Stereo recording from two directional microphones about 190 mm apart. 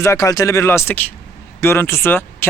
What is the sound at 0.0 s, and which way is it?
Speech, 15° left (ahead or behind).